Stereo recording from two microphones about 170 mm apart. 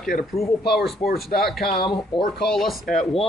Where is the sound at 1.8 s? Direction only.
25° left (ahead or behind).